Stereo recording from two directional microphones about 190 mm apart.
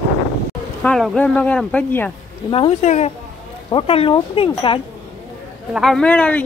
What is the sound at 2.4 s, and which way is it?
Speech, 25° left (ahead or behind).